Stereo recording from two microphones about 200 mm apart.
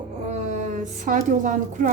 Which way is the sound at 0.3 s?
35° right (ahead or behind).